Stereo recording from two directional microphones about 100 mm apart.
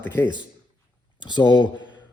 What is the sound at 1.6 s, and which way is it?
Speech, 50° right (ahead or behind).